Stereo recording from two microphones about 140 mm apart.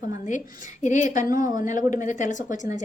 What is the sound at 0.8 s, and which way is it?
Speech, 60° left (ahead or behind).